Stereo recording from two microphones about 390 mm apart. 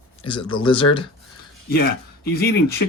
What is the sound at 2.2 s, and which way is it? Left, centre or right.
Speech, left.